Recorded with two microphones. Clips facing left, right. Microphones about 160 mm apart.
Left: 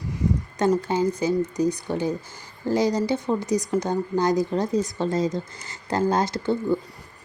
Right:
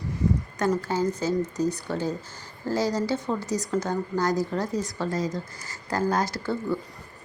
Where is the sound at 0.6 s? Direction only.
20° left (ahead or behind).